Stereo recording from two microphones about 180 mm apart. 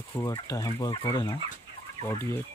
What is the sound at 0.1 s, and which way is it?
Speech, 20° left (ahead or behind).